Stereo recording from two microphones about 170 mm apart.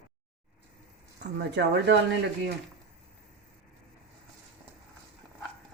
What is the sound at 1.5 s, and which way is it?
Speech, 85° right.